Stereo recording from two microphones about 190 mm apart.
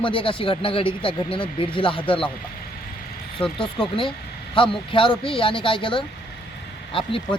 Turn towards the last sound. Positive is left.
turn(degrees=30)  # may be behind; listen again after turning